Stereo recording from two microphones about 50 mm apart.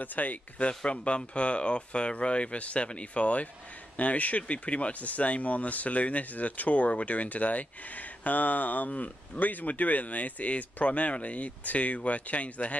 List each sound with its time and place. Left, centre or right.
0.0 s speech: left